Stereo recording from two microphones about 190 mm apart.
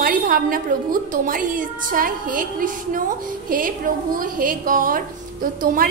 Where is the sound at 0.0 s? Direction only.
50° right (ahead or behind).